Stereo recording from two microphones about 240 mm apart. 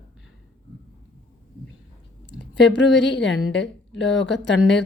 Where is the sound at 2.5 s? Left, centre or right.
Left.